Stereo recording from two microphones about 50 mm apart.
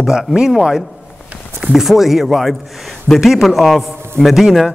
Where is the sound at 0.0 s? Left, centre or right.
Centre.